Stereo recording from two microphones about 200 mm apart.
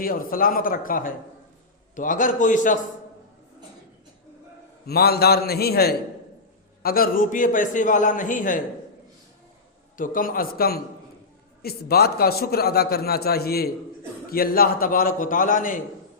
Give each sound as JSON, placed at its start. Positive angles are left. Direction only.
{"t": 0.0, "sound": "a man's voice", "side_deg": 45}
{"t": 4.9, "sound": "a man's voice", "side_deg": 50}
{"t": 10.0, "sound": "a man's voice", "side_deg": 45}